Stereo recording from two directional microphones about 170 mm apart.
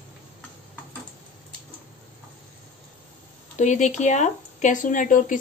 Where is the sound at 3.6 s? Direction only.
45° left (ahead or behind).